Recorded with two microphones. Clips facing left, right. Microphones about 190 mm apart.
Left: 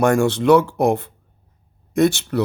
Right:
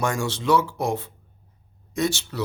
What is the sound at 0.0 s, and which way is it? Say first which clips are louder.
Speech: left 9 dB; 60° left (ahead or behind).